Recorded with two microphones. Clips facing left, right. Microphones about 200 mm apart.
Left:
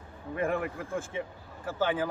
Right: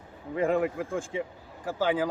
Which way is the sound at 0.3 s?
20° right (ahead or behind).